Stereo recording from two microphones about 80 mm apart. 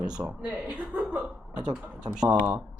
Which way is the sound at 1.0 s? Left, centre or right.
Centre.